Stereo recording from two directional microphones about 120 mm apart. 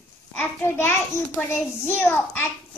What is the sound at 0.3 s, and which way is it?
A child's voice, 15° left (ahead or behind).